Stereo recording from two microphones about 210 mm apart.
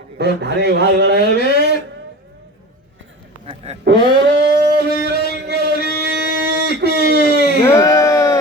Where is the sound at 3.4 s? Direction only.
30° right (ahead or behind).